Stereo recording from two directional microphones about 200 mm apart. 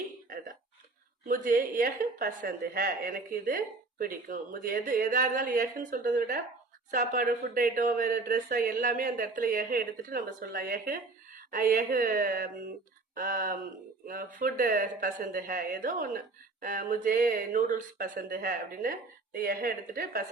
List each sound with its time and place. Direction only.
1.3 s speech: 40° right (ahead or behind)